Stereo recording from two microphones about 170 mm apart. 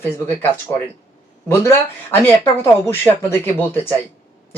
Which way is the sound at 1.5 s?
15° left (ahead or behind).